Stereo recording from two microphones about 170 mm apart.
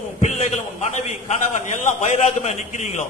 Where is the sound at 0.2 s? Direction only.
40° left (ahead or behind).